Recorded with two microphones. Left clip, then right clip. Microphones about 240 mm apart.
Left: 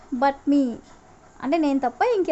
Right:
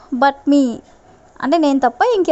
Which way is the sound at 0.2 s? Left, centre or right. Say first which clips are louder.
Right 7 dB; right.